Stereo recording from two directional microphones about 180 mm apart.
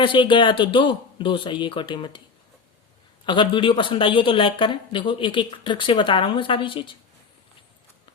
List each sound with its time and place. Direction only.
0.0 s speech: 25° left (ahead or behind)
3.2 s speech: 25° left (ahead or behind)